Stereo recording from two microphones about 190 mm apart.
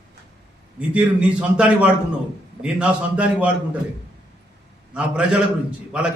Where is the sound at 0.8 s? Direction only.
5° right (ahead or behind).